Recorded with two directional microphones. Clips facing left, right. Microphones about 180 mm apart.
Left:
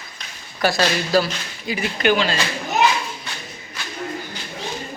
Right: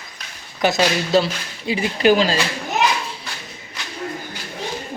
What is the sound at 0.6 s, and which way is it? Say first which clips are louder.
Speech: right 2 dB; 20° right (ahead or behind).